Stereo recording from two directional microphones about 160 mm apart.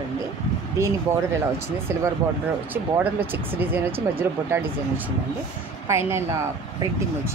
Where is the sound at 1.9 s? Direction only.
15° right (ahead or behind).